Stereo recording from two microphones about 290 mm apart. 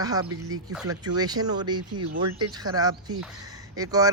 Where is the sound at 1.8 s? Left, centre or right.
Right.